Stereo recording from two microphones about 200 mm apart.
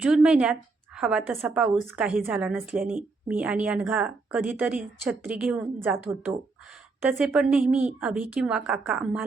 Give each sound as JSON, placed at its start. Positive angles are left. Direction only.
{"t": 0.0, "sound": "a woman's voice", "side_deg": -5}